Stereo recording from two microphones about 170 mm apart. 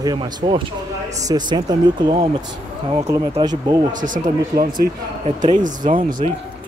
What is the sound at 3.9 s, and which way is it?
Speech, 50° right (ahead or behind).